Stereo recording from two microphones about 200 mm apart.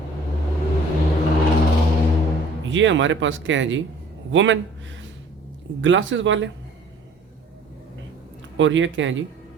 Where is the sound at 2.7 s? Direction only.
70° right (ahead or behind).